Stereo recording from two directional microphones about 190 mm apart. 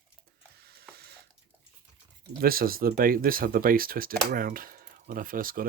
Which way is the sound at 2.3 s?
50° right (ahead or behind).